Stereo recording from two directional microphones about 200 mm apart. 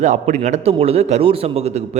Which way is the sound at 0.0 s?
35° right (ahead or behind).